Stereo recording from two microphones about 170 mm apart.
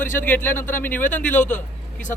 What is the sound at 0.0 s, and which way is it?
A man's voice, 10° left (ahead or behind).